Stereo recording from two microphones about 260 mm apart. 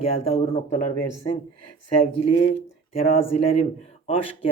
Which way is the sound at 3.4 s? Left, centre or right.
Left.